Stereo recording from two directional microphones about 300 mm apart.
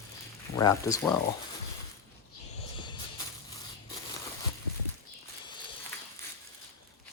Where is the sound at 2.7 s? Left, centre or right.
Centre.